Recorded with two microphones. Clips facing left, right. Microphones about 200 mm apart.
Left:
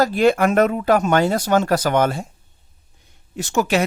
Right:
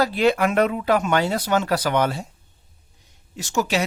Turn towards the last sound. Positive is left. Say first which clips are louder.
# left 4 dB
turn(degrees=55)  # may be behind; listen again after turning